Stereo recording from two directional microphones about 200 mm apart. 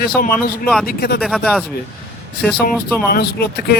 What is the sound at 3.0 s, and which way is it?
Speech, 55° left (ahead or behind).